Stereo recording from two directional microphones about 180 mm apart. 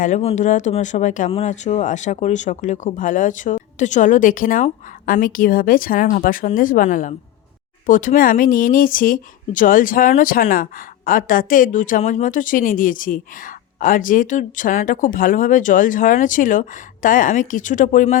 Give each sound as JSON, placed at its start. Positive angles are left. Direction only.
{"t": 0.0, "sound": "speech", "side_deg": 40}